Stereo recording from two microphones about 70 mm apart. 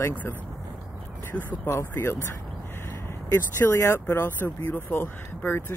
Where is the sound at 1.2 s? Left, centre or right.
Left.